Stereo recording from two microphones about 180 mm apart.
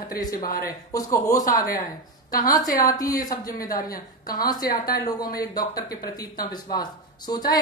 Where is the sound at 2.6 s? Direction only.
50° left (ahead or behind).